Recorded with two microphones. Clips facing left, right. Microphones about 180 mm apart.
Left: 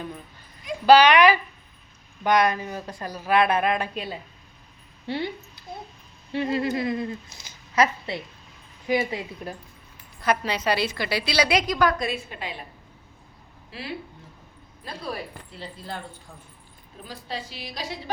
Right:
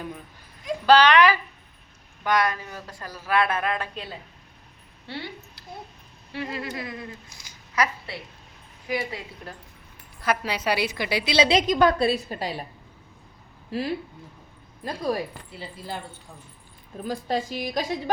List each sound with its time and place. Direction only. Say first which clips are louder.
0.9 s a child's voice: left 2 dB; 10° left (ahead or behind)
6.3 s a woman's voice: left 7 dB; 25° left (ahead or behind)
10.2 s a woman's voice: left 2 dB; 5° right (ahead or behind); by 12.6 s 40° right (ahead or behind)
13.7 s speech: right 7 dB; 45° right (ahead or behind)
15.5 s speech: right 1 dB; 5° right (ahead or behind)
17.0 s a woman's voice: right 8 dB; 45° right (ahead or behind)